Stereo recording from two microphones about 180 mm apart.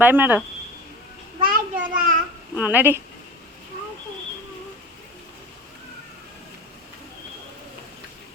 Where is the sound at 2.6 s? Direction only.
10° right (ahead or behind).